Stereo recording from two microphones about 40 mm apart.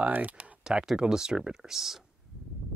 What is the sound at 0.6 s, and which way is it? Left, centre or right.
Speech, right.